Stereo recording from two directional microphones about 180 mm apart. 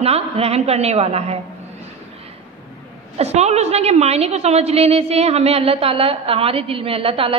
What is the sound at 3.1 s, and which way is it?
A woman's voice, 35° right (ahead or behind).